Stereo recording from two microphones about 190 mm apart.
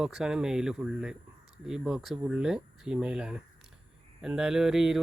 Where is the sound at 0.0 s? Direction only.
5° right (ahead or behind).